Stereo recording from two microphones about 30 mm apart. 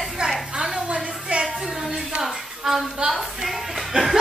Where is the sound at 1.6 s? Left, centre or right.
Centre.